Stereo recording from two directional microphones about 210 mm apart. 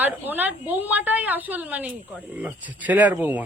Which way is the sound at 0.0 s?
10° right (ahead or behind).